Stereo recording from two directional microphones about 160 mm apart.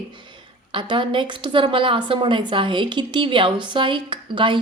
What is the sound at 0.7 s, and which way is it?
A woman's voice, 30° right (ahead or behind).